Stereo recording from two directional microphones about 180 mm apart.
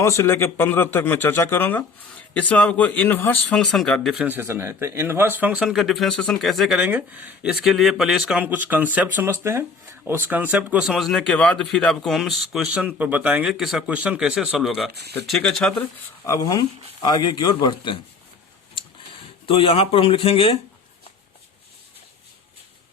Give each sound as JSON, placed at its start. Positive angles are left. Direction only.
{"t": 0.0, "sound": "speech", "side_deg": 15}
{"t": 16.2, "sound": "speech", "side_deg": 20}
{"t": 19.5, "sound": "speech", "side_deg": 30}